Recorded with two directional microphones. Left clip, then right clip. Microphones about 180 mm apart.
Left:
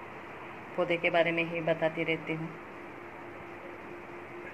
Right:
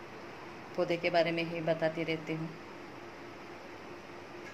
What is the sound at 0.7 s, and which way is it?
Speech, 10° right (ahead or behind).